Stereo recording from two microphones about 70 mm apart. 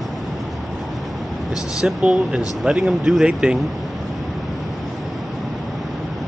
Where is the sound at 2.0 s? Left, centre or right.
Centre.